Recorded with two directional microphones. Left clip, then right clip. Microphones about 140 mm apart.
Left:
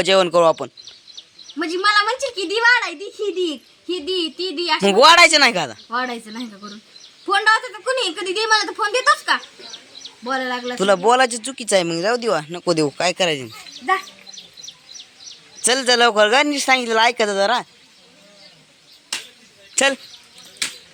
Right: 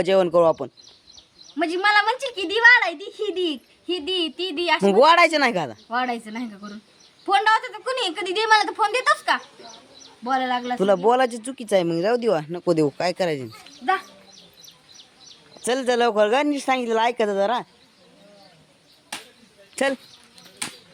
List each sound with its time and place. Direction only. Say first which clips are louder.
0.0 s speech: left 3 dB; 15° right (ahead or behind)
1.5 s a woman's voice: left 2 dB; 40° right (ahead or behind)
4.8 s speech: left 5 dB; 15° right (ahead or behind)
7.3 s a woman's voice: left 2 dB; 35° right (ahead or behind)
10.0 s a sound: even; 50° right (ahead or behind)
10.8 s speech: left 4 dB; 15° right (ahead or behind)
12.1 s speech: left 1 dB; 35° right (ahead or behind); by 13.5 s 15° right (ahead or behind)
15.6 s speech: left 5 dB; 10° right (ahead or behind)
19.7 s speech: left 5 dB; 15° right (ahead or behind)